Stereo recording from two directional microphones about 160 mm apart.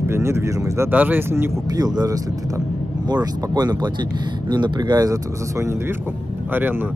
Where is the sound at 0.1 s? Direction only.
15° right (ahead or behind).